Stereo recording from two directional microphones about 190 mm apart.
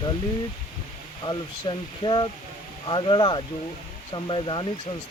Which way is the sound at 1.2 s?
25° left (ahead or behind).